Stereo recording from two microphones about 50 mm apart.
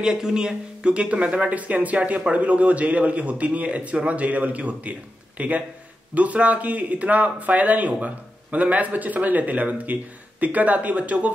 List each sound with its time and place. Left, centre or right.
0.0 s a man's voice: centre; by 11.3 s right